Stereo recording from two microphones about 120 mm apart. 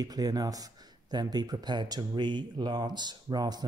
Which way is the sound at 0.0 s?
30° right (ahead or behind).